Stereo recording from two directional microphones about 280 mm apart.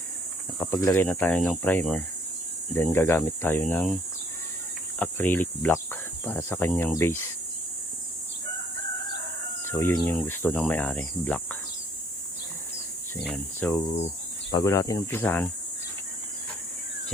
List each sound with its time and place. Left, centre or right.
0.6 s speech: centre
4.9 s speech: centre
9.6 s speech: centre
13.2 s speech: centre